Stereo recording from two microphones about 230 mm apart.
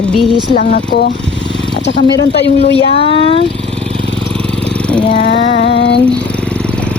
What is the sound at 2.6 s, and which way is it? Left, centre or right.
Speech, left.